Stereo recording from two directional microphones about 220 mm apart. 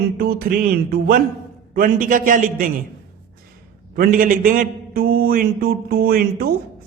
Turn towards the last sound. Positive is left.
turn(degrees=-40)  # may be behind; listen again after turning